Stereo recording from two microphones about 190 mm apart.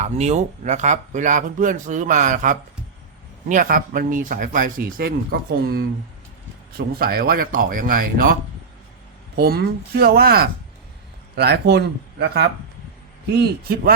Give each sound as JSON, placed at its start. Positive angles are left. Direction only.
{"t": 0.0, "sound": "speech", "side_deg": -35}